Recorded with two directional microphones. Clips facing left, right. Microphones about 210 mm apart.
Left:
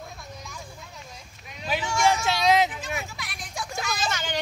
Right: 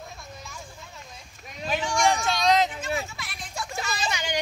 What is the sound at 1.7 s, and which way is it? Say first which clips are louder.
Vehicle: even; 5° left (ahead or behind).